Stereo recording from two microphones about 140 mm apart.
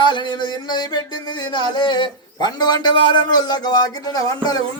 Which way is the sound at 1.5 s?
35° left (ahead or behind).